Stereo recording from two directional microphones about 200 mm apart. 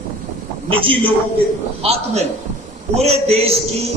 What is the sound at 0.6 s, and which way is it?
Speech, 25° right (ahead or behind).